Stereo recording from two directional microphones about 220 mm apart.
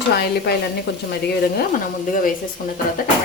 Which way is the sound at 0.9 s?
50° left (ahead or behind).